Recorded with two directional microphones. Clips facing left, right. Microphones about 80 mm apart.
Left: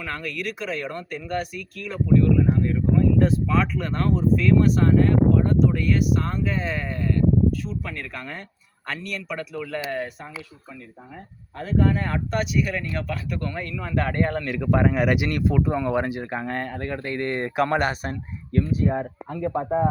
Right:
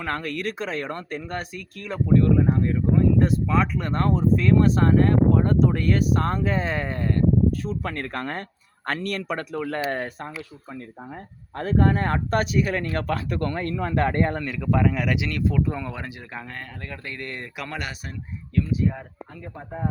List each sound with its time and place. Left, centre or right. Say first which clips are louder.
0.0 s speech: right 2 dB; right
11.5 s speech: right 1 dB; right
14.5 s speech: left 2 dB; centre; by 18.9 s left
18.9 s speech: left 10 dB; left